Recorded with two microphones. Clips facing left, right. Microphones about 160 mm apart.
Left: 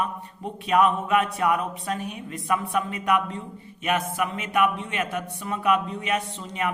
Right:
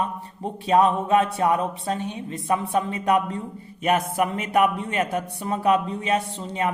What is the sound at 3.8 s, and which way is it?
Speech, 40° right (ahead or behind).